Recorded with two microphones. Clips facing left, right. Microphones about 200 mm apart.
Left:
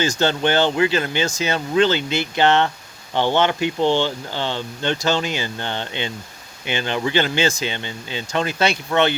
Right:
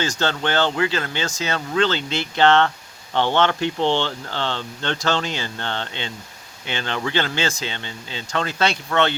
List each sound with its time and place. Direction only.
0.0 s speech: 10° left (ahead or behind)